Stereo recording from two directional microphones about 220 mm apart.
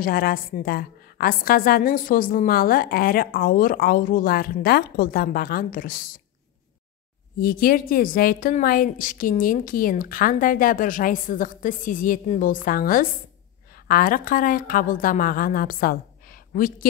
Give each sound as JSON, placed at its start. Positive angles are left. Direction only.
{"t": 0.0, "sound": "a woman's voice", "side_deg": 40}
{"t": 7.3, "sound": "a woman's voice", "side_deg": 40}